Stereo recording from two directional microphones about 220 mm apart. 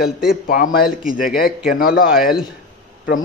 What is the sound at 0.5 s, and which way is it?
A man's voice, 40° left (ahead or behind).